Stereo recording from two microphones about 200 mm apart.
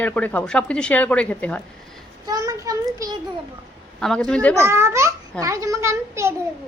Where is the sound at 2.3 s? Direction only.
20° right (ahead or behind).